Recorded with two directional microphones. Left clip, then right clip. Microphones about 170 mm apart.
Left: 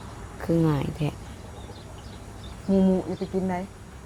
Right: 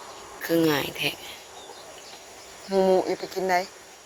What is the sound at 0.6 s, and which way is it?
Speech, 10° right (ahead or behind).